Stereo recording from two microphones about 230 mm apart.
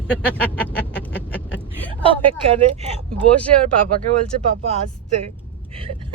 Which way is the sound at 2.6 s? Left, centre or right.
Right.